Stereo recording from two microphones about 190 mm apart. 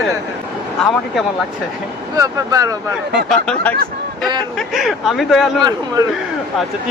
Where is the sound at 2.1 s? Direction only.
20° right (ahead or behind).